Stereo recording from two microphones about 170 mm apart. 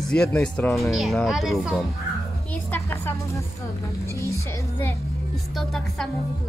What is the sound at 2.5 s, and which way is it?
Music, 10° left (ahead or behind).